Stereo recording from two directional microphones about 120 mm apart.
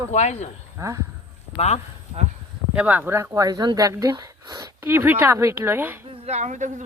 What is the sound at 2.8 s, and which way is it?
A woman's voice, 15° right (ahead or behind).